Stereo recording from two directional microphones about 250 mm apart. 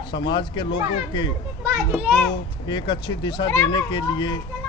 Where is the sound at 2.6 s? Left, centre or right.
Centre.